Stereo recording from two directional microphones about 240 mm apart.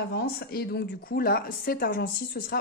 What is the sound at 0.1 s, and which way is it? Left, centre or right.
Speech, left.